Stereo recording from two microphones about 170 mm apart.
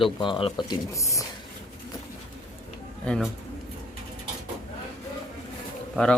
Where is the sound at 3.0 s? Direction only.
5° left (ahead or behind).